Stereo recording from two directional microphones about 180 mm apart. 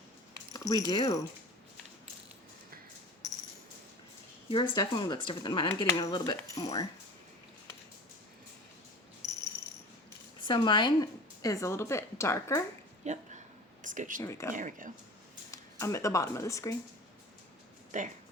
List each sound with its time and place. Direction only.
0.5 s a sound: 20° left (ahead or behind)
0.9 s speech: 20° left (ahead or behind)
4.4 s speech: 30° left (ahead or behind)
9.2 s a sound: 15° left (ahead or behind)
10.4 s speech: 25° left (ahead or behind)
13.0 s speech: 40° right (ahead or behind)
14.2 s speech: 15° left (ahead or behind)
14.5 s speech: 45° right (ahead or behind)
15.5 s speech: 15° left (ahead or behind)
17.9 s speech: 45° right (ahead or behind)